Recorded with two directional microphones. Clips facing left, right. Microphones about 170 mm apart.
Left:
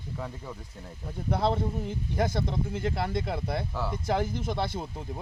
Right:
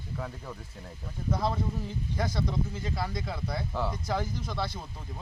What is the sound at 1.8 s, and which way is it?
Speech, 55° left (ahead or behind).